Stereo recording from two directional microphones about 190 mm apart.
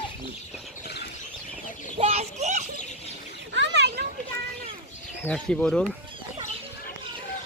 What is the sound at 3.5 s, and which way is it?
Children playing, 65° right (ahead or behind).